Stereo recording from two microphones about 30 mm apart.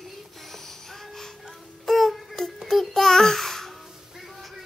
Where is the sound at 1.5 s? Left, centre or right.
Centre.